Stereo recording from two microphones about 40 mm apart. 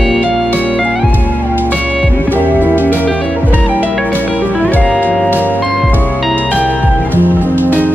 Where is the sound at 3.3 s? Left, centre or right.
Right.